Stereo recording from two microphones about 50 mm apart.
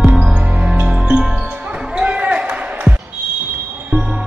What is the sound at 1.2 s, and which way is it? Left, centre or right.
Music, centre.